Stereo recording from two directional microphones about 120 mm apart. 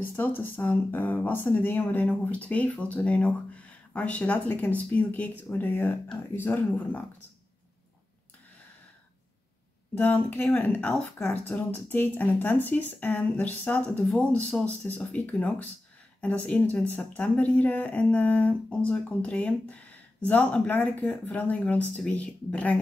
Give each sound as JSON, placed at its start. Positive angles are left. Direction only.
{"t": 0.0, "sound": "speech", "side_deg": 15}
{"t": 9.9, "sound": "speech", "side_deg": 15}